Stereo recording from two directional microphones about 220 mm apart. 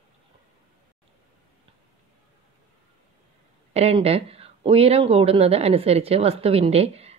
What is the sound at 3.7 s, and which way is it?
Speech, 30° right (ahead or behind).